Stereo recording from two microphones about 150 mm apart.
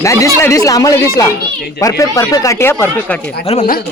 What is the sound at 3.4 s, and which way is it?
Speech, 45° left (ahead or behind).